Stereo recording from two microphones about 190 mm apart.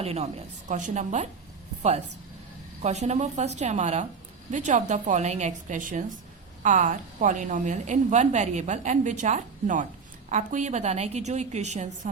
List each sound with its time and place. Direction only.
0.0 s a woman's voice: 35° right (ahead or behind)
2.8 s a woman's voice: 35° right (ahead or behind)